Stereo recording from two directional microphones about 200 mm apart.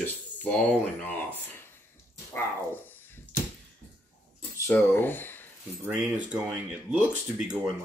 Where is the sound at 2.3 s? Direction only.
10° left (ahead or behind).